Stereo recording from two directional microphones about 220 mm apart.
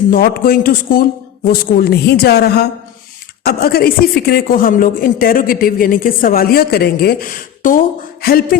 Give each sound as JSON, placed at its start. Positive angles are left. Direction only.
{"t": 0.1, "sound": "a woman's voice", "side_deg": 40}